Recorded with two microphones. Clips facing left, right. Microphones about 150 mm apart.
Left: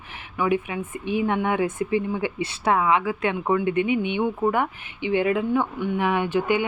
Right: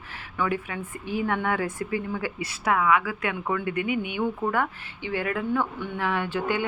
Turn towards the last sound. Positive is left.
turn(degrees=15)  # may be behind; listen again after turning